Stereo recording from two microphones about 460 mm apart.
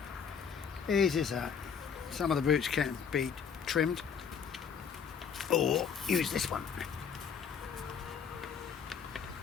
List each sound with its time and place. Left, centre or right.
0.9 s speech: centre
5.4 s speech: centre